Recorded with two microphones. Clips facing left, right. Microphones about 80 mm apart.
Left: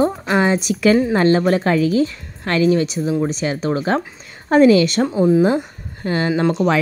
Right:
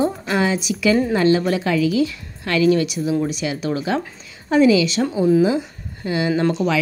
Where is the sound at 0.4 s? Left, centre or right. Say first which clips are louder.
Left 4 dB; left.